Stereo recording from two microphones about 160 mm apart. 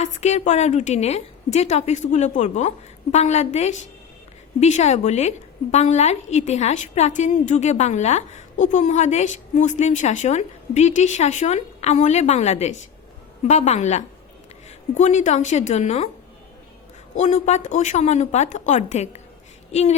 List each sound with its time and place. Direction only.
0.0 s a woman's voice: 45° left (ahead or behind)
17.2 s a woman's voice: 45° left (ahead or behind)